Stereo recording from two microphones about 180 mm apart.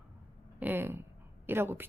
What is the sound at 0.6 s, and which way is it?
A woman's voice, 10° right (ahead or behind).